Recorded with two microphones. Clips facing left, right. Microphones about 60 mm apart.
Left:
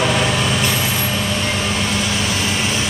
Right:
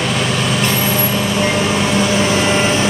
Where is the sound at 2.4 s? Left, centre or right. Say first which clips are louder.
Right 6 dB; right.